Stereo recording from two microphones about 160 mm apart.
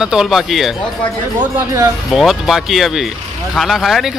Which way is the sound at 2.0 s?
Centre (ahead or behind).